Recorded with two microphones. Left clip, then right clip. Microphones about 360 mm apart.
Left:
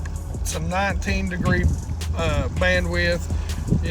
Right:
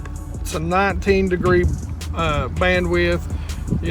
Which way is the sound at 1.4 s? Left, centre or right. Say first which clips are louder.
Right 4 dB; centre.